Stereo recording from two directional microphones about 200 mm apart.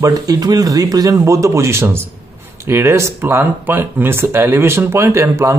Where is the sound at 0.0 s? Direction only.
20° right (ahead or behind).